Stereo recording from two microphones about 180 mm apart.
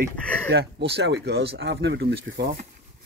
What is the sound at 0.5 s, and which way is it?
Speech, 65° right (ahead or behind).